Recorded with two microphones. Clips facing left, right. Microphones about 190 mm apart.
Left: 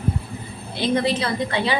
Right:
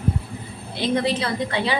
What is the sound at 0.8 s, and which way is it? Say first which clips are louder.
A woman's voice: left 1 dB; 35° left (ahead or behind).